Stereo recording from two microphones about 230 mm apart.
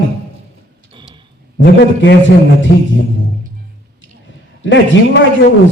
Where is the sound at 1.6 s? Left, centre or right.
Left.